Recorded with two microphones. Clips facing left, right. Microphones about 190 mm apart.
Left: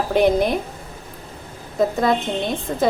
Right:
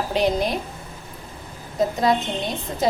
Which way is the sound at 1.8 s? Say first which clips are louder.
Left 2 dB; 55° left (ahead or behind).